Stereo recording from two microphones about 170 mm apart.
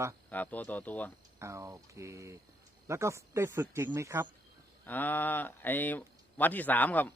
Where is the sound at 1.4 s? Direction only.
15° right (ahead or behind).